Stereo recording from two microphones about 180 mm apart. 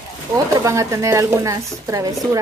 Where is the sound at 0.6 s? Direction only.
15° right (ahead or behind).